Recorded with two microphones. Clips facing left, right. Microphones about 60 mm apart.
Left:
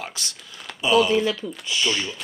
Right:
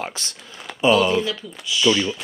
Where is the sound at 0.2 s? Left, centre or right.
Right.